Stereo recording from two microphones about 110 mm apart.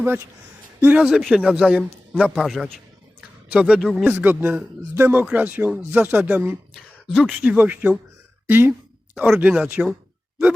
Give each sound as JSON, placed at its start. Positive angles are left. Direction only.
{"t": 0.8, "sound": "a man's voice", "side_deg": -15}
{"t": 3.5, "sound": "a man's voice", "side_deg": -10}
{"t": 6.7, "sound": "speech", "side_deg": -5}
{"t": 9.1, "sound": "a man's voice", "side_deg": -5}